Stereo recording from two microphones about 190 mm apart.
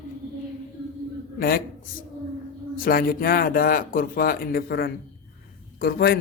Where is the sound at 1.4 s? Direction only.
50° left (ahead or behind).